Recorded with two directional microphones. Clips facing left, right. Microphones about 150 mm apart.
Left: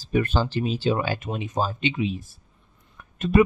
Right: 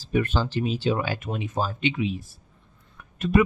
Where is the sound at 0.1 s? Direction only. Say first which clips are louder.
Left 1 dB; 40° left (ahead or behind).